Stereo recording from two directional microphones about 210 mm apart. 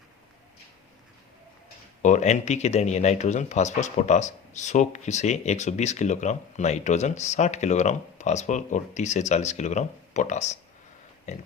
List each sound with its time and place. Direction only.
2.0 s speech: 35° left (ahead or behind)